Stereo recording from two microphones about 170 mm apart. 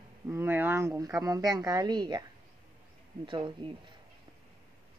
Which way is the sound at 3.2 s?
30° right (ahead or behind).